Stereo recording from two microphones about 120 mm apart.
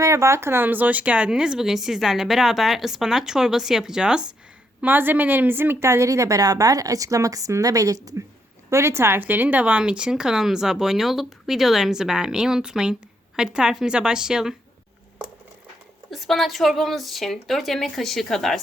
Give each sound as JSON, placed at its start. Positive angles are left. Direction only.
{"t": 0.0, "sound": "a woman's voice", "side_deg": -25}
{"t": 16.0, "sound": "speech", "side_deg": 0}